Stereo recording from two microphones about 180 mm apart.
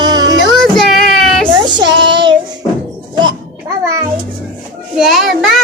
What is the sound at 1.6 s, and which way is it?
Speech, 25° right (ahead or behind).